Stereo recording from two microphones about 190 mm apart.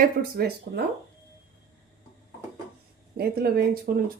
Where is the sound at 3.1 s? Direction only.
55° right (ahead or behind).